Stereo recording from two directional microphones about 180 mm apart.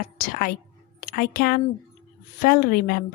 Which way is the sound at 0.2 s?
50° left (ahead or behind).